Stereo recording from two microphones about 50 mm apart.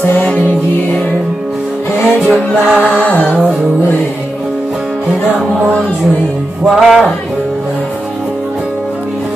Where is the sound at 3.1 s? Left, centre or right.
Left.